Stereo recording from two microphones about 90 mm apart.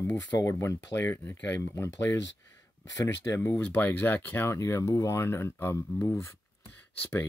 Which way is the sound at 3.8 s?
20° left (ahead or behind).